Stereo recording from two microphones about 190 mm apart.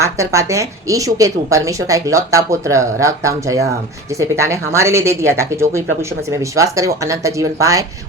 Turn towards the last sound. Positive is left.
turn(degrees=-15)  # may be behind; listen again after turning